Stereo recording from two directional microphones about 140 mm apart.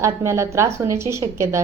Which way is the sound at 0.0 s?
20° right (ahead or behind).